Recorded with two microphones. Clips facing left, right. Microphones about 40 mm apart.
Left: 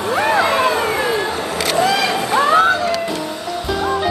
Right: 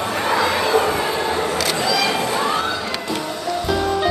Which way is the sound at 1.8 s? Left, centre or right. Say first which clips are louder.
Left 7 dB; left.